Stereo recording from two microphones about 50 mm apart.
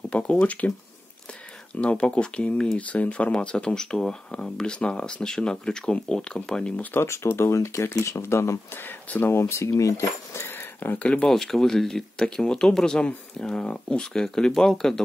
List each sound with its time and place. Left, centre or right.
0.1 s speech: left
1.8 s speech: left
2.9 s speech: left
7.0 s speech: left
10.4 s a sound: left
11.0 s speech: left
11.2 s speech: centre